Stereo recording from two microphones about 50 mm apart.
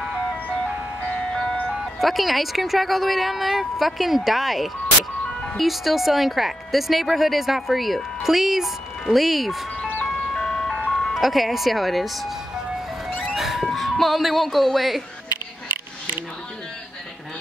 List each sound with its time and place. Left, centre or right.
1.0 s ice cream truck: centre
1.7 s speech: centre
10.0 s ice cream truck: centre
11.1 s speech: centre
13.3 s music: centre